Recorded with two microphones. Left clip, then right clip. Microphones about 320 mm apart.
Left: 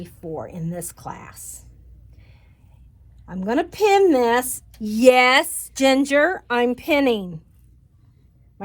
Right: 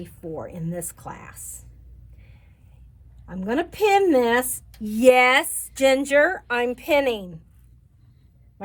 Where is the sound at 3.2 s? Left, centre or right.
Centre.